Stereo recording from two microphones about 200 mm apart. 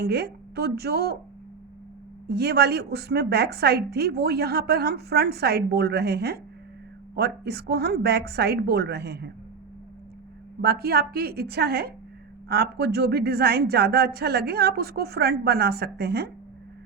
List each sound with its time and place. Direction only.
0.0 s a woman's voice: 55° right (ahead or behind)
2.2 s a woman's voice: 55° right (ahead or behind)
10.6 s a woman's voice: 50° right (ahead or behind)